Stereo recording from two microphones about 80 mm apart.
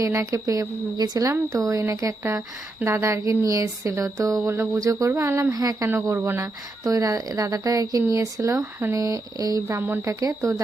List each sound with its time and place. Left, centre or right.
0.0 s speech: right
4.8 s speech: right
5.9 s speech: right
6.8 s speech: right